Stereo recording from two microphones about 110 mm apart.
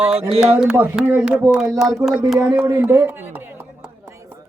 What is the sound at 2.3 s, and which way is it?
Speech, 20° right (ahead or behind).